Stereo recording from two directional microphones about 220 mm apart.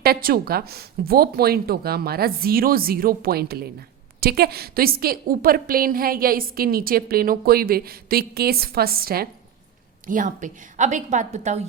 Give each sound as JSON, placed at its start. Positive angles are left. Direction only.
{"t": 0.0, "sound": "a woman's voice", "side_deg": -40}